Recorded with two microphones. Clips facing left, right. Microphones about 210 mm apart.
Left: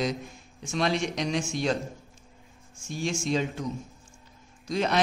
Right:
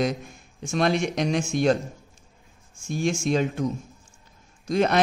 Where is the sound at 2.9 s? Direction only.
55° right (ahead or behind).